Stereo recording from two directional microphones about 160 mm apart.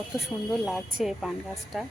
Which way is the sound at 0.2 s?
Centre (ahead or behind).